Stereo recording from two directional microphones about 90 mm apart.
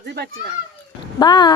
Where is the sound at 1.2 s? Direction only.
50° left (ahead or behind).